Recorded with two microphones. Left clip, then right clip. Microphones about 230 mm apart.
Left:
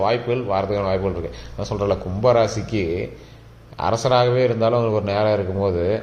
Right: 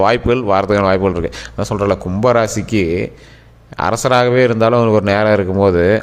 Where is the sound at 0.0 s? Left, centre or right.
Right.